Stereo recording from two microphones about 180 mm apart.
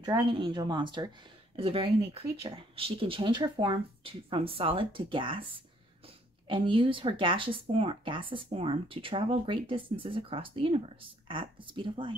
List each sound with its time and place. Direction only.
0.0 s speech: 25° right (ahead or behind)
6.4 s speech: 30° right (ahead or behind)